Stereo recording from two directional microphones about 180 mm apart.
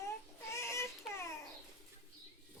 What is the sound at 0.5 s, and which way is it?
Baby cry, 15° left (ahead or behind).